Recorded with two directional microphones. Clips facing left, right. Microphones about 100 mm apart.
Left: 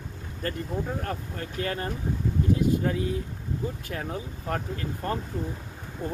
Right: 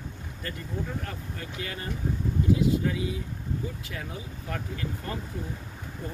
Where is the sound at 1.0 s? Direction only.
45° left (ahead or behind).